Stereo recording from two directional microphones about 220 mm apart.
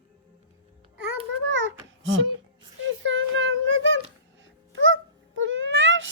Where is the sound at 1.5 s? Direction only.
60° right (ahead or behind).